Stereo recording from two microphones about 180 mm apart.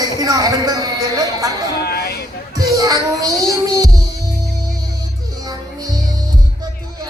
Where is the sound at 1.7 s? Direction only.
60° left (ahead or behind).